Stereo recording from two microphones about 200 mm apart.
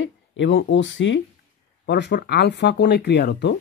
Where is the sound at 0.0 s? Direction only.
65° left (ahead or behind).